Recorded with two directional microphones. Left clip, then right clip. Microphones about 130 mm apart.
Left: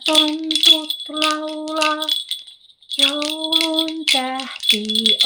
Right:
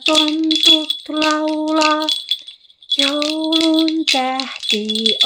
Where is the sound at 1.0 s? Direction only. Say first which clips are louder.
Right 3 dB; 70° right (ahead or behind).